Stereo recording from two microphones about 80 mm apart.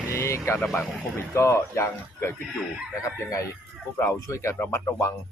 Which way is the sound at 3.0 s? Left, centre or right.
Left.